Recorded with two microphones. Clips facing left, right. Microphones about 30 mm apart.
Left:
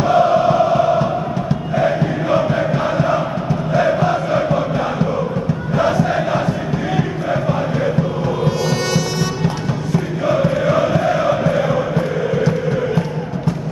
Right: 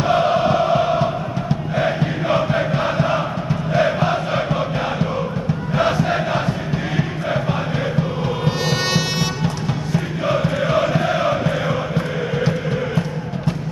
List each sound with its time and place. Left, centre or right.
0.0 s chant: right
1.8 s music: centre
2.5 s chant: centre
3.7 s crowd: centre
7.0 s music: centre
8.5 s music: right
9.9 s music: centre
10.4 s chant: centre